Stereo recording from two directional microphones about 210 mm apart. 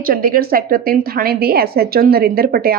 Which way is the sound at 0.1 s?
45° right (ahead or behind).